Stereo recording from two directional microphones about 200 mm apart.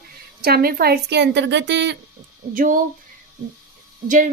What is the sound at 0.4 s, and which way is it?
A woman's voice, 50° right (ahead or behind).